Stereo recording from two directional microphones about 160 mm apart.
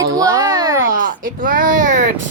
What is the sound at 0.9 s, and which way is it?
Speech, 60° right (ahead or behind).